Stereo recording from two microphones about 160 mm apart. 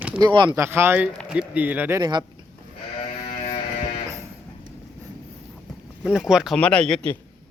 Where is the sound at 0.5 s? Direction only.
15° right (ahead or behind).